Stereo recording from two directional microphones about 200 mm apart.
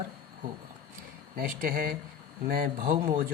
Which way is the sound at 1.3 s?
45° right (ahead or behind).